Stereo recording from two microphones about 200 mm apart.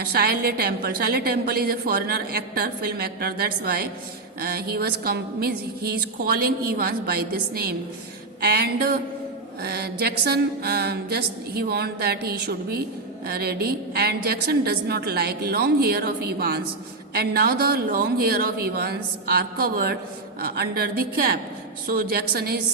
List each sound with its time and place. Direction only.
0.0 s a woman's voice: 50° right (ahead or behind)